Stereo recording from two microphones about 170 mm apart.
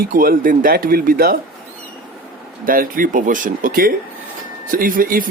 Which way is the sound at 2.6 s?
55° right (ahead or behind).